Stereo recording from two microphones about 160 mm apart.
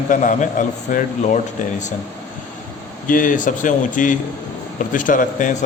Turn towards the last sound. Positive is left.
turn(degrees=55)  # may be behind; listen again after turning